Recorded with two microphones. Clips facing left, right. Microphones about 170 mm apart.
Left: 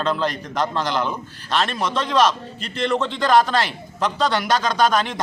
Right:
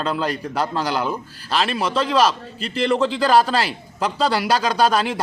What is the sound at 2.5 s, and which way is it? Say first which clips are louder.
Speech: right 6 dB; 30° right (ahead or behind).